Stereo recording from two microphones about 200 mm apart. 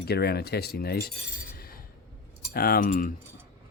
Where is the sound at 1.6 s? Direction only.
50° left (ahead or behind).